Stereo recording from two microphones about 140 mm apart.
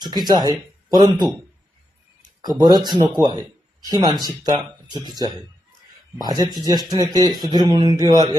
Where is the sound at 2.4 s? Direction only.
30° right (ahead or behind).